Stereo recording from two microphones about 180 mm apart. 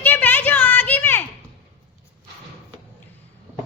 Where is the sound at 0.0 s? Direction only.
10° left (ahead or behind).